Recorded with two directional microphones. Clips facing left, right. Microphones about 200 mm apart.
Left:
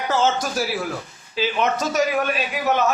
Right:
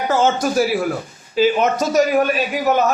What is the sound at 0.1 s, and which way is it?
A man's voice, 50° right (ahead or behind).